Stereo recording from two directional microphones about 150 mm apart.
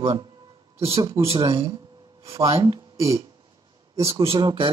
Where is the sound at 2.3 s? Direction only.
40° right (ahead or behind).